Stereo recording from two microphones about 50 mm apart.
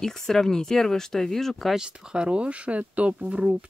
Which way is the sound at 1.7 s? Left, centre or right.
Centre.